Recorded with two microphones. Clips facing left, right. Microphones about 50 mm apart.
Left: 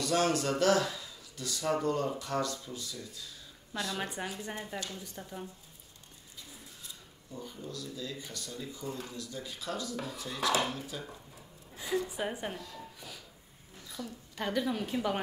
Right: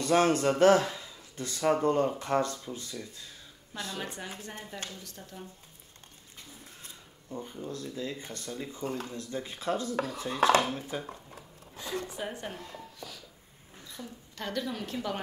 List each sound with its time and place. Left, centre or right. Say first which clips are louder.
0.0 s speech: right 5 dB; right
3.9 s a woman's voice: left 2 dB; left
6.8 s a sound: right 1 dB; right
7.6 s speech: right 4 dB; right
12.2 s a woman's voice: left 2 dB; centre
12.5 s speech: right 1 dB; right
14.0 s a woman's voice: left 2 dB; centre
14.3 s a woman's voice: left 2 dB; centre